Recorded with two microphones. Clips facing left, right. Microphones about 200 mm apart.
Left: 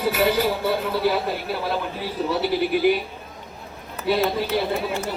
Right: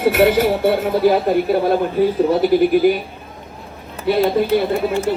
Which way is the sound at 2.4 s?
45° right (ahead or behind).